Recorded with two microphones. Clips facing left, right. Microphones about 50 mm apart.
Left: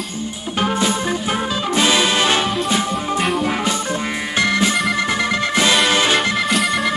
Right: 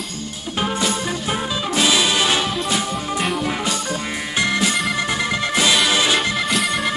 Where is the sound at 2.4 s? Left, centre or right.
Centre.